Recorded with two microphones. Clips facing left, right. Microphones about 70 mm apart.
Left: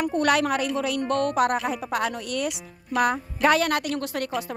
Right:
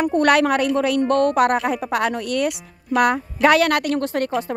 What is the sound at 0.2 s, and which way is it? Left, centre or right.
A woman's voice, right.